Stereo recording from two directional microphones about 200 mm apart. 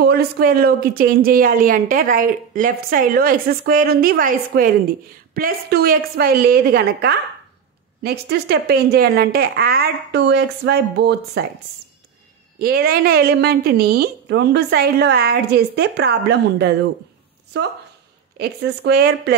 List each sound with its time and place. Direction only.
0.0 s speech: 50° right (ahead or behind)
12.5 s speech: 50° right (ahead or behind)
18.4 s speech: 55° right (ahead or behind)